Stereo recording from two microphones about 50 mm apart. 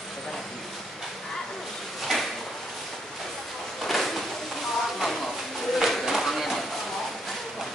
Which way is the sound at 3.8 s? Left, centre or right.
Centre.